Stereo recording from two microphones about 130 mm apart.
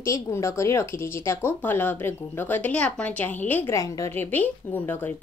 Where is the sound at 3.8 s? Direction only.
25° left (ahead or behind).